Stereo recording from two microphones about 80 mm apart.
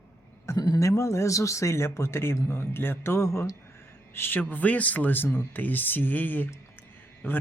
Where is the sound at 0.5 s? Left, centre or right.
Left.